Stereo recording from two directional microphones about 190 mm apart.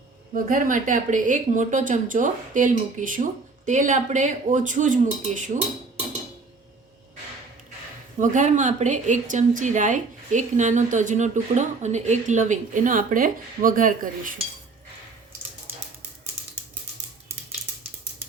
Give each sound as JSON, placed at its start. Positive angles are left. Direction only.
{"t": 0.4, "sound": "a woman's voice", "side_deg": -45}
{"t": 8.2, "sound": "a woman's voice", "side_deg": -40}